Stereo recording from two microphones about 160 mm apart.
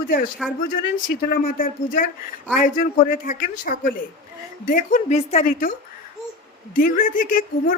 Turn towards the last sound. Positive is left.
turn(degrees=55)  # may be behind; listen again after turning